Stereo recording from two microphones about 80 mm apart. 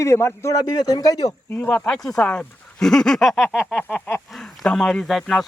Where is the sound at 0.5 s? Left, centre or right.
Left.